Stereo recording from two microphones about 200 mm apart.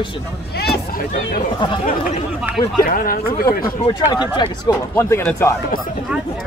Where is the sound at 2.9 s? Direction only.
45° left (ahead or behind).